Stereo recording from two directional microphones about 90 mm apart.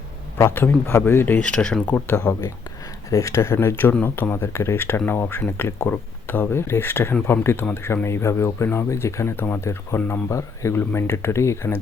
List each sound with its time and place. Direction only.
0.5 s speech: 25° left (ahead or behind)
1.4 s speech: 10° left (ahead or behind)
2.3 s speech: 30° left (ahead or behind)